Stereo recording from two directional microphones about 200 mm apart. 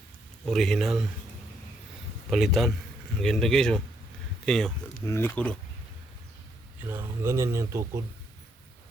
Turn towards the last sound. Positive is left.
turn(degrees=-15)  # may be behind; listen again after turning